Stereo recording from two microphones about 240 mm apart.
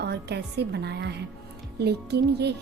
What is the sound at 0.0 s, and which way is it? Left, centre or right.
A woman's voice, right.